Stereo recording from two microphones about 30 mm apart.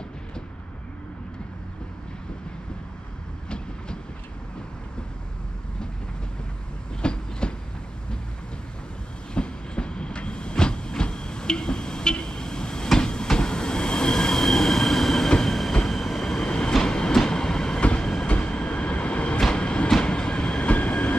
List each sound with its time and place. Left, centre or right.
3.4 s train: left
7.0 s train: left
9.3 s train: left; by 16.4 s centre
16.4 s train: left
17.1 s train: left
18.3 s train: left
19.5 s train: left
20.6 s train: left